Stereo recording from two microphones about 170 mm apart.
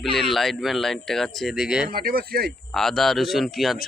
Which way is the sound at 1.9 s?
60° right (ahead or behind).